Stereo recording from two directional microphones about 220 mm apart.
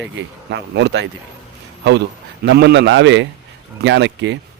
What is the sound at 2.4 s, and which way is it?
Speech, 50° right (ahead or behind).